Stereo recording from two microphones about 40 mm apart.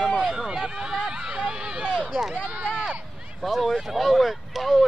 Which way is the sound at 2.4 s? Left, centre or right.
Right.